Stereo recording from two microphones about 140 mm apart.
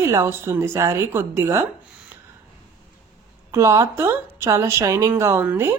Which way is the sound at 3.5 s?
20° right (ahead or behind).